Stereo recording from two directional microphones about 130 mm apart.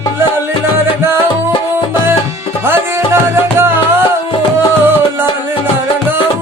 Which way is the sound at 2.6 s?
15° right (ahead or behind).